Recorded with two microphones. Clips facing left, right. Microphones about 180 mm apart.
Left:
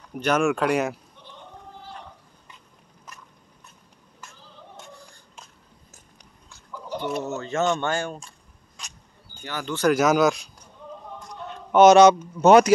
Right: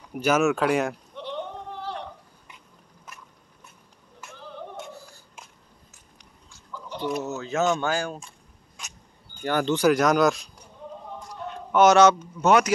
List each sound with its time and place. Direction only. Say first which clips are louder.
0.1 s speech: even; 5° right (ahead or behind)
1.1 s a sound: right 12 dB; 80° right
4.4 s music: right 10 dB; 65° right (ahead or behind)
4.9 s a sound: right 3 dB; 5° right (ahead or behind)
7.2 s speech: even; centre (ahead or behind)
9.4 s speech: right 9 dB; 55° right (ahead or behind)
9.9 s speech: left 1 dB; centre (ahead or behind)
11.7 s speech: left 4 dB; 20° left (ahead or behind)
12.4 s speech: left 7 dB; 30° left (ahead or behind)